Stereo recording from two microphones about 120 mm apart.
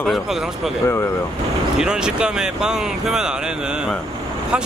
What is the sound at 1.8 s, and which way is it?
Speech, 5° right (ahead or behind).